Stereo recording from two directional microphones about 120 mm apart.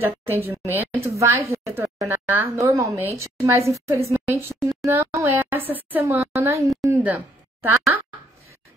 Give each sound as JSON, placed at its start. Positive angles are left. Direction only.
{"t": 0.0, "sound": "a woman's voice", "side_deg": -15}